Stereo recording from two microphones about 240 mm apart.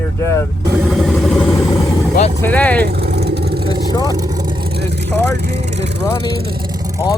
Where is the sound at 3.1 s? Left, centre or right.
Right.